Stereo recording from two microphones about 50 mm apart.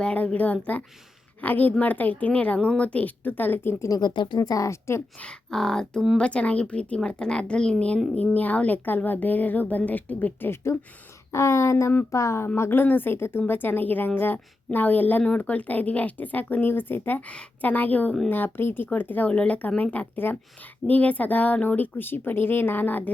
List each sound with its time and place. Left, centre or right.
0.0 s a woman's voice: left
3.2 s a woman's voice: left
4.6 s speech: left
5.2 s speech: centre
6.1 s speech: left
8.1 s a woman's voice: left
10.5 s speech: left
11.3 s speech: left
12.1 s speech: left
12.5 s speech: left
12.8 s a woman's voice: left
17.2 s a woman's voice: left
19.3 s a woman's voice: left